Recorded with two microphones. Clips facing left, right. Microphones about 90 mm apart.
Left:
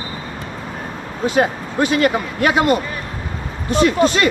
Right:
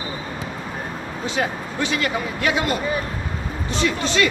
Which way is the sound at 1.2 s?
45° left (ahead or behind).